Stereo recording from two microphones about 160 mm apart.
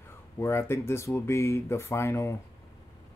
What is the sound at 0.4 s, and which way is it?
Speech, 15° left (ahead or behind).